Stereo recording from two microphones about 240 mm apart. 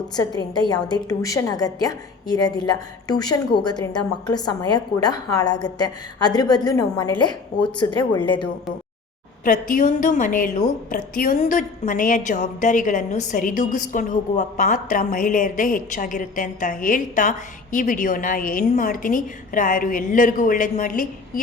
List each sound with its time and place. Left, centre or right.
0.2 s a woman's voice: centre
9.4 s a woman's voice: left